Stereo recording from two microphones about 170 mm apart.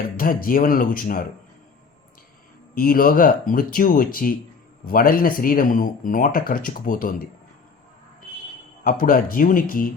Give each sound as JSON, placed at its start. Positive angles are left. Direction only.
{"t": 0.0, "sound": "speech", "side_deg": 55}
{"t": 2.7, "sound": "speech", "side_deg": 55}
{"t": 8.8, "sound": "speech", "side_deg": 55}